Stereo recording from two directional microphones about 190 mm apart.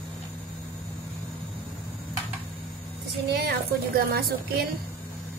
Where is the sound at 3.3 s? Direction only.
55° right (ahead or behind).